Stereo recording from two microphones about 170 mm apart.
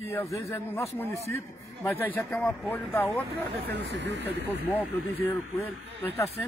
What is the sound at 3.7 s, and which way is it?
Speech, 90° right.